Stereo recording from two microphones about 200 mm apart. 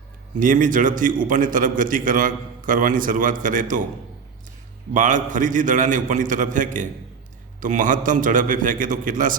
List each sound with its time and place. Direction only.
0.3 s a man's voice: 40° right (ahead or behind)
4.9 s a man's voice: 40° right (ahead or behind)